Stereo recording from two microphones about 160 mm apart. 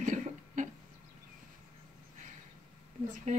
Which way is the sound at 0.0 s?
50° right (ahead or behind).